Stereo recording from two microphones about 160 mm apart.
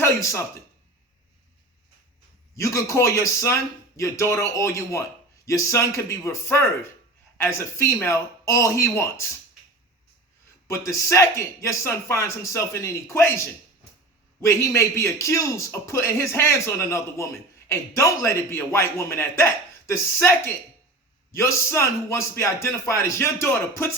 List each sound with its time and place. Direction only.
0.0 s speech: 20° left (ahead or behind)
2.6 s speech: 20° left (ahead or behind)
10.7 s a man's voice: 20° left (ahead or behind)